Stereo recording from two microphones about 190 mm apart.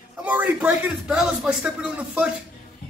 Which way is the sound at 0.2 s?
10° right (ahead or behind).